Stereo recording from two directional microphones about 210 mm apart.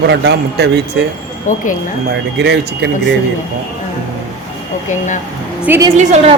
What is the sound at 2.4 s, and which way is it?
Speech, 55° right (ahead or behind).